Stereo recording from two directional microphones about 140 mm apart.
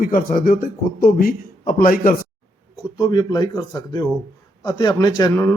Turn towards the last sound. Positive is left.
turn(degrees=15)  # may be behind; listen again after turning